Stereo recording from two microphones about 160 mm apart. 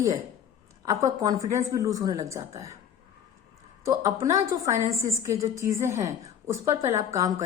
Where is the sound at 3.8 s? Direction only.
20° right (ahead or behind).